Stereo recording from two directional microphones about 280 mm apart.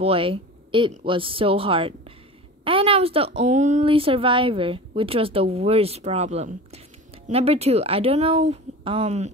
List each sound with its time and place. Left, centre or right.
0.0 s speech: centre